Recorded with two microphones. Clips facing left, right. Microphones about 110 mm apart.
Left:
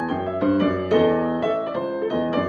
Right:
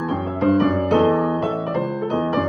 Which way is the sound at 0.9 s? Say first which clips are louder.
Even; 25° right (ahead or behind).